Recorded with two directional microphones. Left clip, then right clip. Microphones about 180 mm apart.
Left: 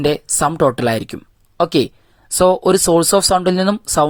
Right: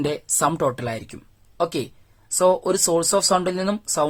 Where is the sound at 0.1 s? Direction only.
35° left (ahead or behind).